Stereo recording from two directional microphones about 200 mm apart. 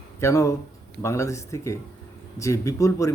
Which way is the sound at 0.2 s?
15° left (ahead or behind).